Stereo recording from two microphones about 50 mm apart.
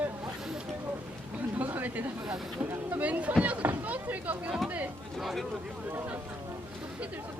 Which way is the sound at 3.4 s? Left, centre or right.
Right.